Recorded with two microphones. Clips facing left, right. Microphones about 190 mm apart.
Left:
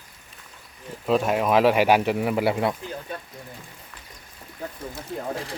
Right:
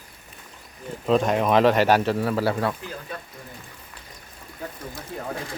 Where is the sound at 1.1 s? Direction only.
5° left (ahead or behind).